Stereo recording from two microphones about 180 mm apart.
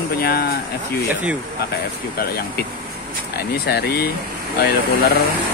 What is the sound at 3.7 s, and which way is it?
Speech, 65° left (ahead or behind).